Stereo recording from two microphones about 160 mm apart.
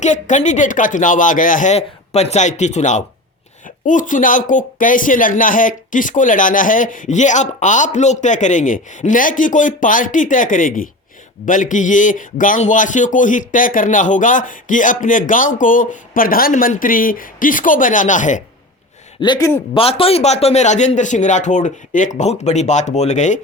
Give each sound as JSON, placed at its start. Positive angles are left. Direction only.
{"t": 0.0, "sound": "speech", "side_deg": 50}
{"t": 19.2, "sound": "speech", "side_deg": 30}